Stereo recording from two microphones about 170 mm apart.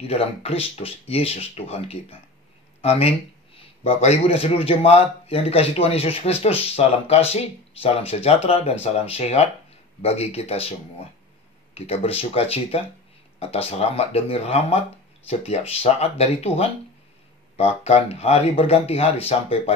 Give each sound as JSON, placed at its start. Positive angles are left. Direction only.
{"t": 0.0, "sound": "speech", "side_deg": 35}
{"t": 11.7, "sound": "speech", "side_deg": 35}